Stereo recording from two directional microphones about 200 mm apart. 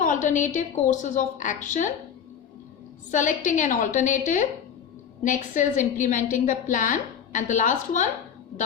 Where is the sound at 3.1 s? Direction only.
40° left (ahead or behind).